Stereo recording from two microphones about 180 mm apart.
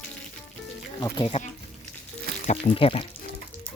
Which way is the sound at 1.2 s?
35° left (ahead or behind).